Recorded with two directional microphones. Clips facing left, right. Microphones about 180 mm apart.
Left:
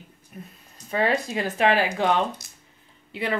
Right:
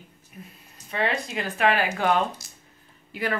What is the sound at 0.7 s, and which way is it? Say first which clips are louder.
Speech: left 4 dB; 35° left (ahead or behind).